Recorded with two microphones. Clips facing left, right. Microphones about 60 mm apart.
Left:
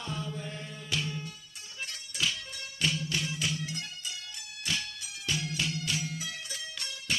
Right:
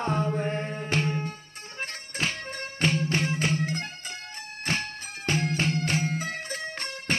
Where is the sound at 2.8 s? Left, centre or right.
Right.